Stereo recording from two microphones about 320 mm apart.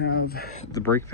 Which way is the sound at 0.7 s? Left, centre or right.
Centre.